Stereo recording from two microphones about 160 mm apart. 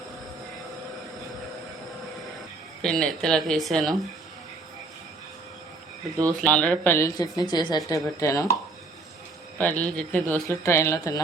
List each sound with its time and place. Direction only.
2.8 s speech: 5° left (ahead or behind)
6.3 s speech: 5° left (ahead or behind)
7.2 s a woman's voice: 25° left (ahead or behind)
9.6 s speech: 10° left (ahead or behind)